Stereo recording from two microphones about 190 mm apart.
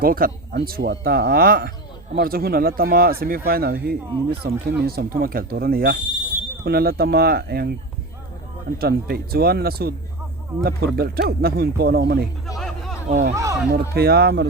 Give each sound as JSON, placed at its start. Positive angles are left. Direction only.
{"t": 0.0, "sound": "speech", "side_deg": -50}
{"t": 8.8, "sound": "speech", "side_deg": -55}
{"t": 13.1, "sound": "speech", "side_deg": -40}
{"t": 13.3, "sound": "speech", "side_deg": -15}
{"t": 13.9, "sound": "speech", "side_deg": -55}